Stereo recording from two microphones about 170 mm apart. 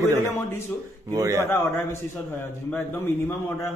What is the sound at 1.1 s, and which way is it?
Speech, 20° right (ahead or behind).